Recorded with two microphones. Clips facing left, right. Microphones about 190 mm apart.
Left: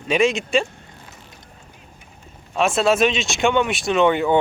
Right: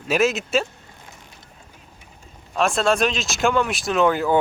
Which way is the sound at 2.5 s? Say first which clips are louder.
Left 2 dB; centre (ahead or behind).